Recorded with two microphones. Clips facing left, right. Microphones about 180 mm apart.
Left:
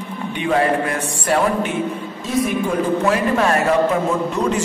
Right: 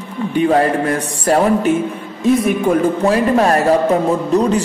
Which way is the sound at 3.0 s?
35° right (ahead or behind).